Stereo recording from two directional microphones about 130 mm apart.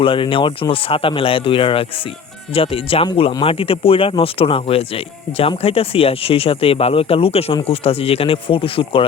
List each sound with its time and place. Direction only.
0.0 s speech: 40° left (ahead or behind)